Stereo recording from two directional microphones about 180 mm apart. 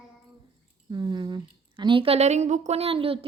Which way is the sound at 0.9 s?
25° right (ahead or behind).